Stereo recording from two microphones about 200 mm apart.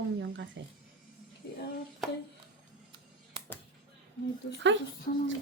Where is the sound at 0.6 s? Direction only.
60° right (ahead or behind).